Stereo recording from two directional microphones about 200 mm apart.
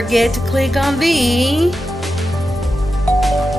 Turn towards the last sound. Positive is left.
turn(degrees=0)  # may be behind; listen again after turning